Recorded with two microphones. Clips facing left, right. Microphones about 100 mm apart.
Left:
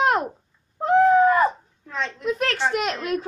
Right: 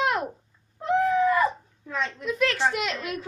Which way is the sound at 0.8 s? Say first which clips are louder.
Left 6 dB; 50° left (ahead or behind).